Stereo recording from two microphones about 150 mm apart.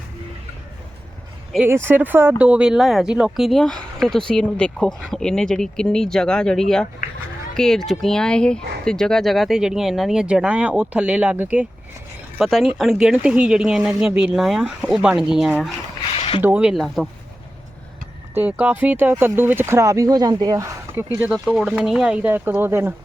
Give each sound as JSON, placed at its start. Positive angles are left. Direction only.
{"t": 1.5, "sound": "speech", "side_deg": -15}
{"t": 16.1, "sound": "a sound", "side_deg": 40}
{"t": 16.4, "sound": "speech", "side_deg": -10}
{"t": 18.3, "sound": "speech", "side_deg": -10}
{"t": 21.4, "sound": "speech", "side_deg": -5}